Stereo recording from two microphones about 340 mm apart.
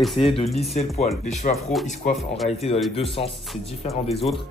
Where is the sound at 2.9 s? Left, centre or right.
Centre.